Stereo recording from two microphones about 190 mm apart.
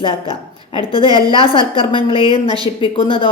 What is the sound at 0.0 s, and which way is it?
A woman's voice, 25° left (ahead or behind).